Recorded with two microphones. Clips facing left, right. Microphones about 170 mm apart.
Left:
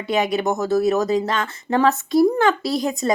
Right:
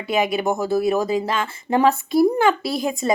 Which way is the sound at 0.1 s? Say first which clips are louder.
Even; 5° right (ahead or behind).